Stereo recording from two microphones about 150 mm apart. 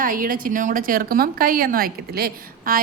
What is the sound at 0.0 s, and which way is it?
A woman's voice, 65° right (ahead or behind).